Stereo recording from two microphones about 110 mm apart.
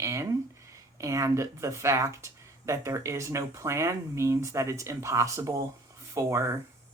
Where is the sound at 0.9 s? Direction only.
30° right (ahead or behind).